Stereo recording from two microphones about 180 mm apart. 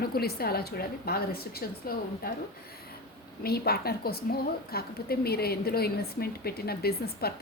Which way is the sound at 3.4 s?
60° left (ahead or behind).